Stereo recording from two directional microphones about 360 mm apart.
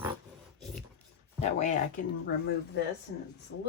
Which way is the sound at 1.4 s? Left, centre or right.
Centre.